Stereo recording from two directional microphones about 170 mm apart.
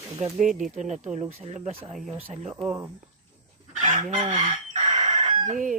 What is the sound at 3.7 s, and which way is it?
Chicken, 50° right (ahead or behind).